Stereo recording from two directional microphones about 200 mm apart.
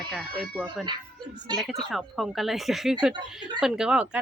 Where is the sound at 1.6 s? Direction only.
Centre (ahead or behind).